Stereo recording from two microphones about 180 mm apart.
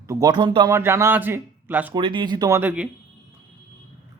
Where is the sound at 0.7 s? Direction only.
15° right (ahead or behind).